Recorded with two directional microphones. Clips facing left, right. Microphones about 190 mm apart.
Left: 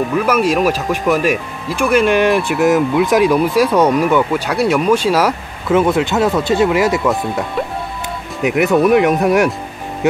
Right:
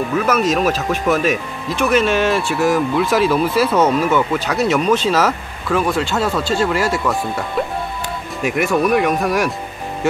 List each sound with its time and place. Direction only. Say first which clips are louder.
0.2 s speech: left 2 dB; 10° left (ahead or behind)
8.4 s speech: left 4 dB; 20° left (ahead or behind)